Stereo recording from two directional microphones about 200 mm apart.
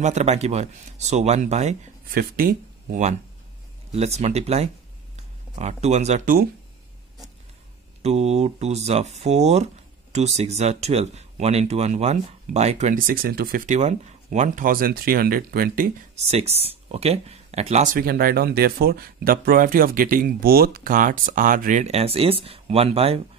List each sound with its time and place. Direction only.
0.0 s speech: 35° right (ahead or behind)
8.0 s speech: 30° right (ahead or behind)